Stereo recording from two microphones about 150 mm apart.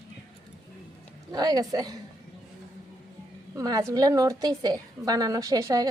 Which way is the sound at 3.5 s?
25° right (ahead or behind).